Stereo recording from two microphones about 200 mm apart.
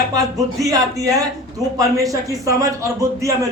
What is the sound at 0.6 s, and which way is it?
Speech, 15° right (ahead or behind).